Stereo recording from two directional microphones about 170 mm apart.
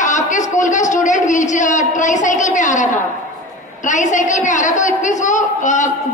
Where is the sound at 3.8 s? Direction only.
45° left (ahead or behind).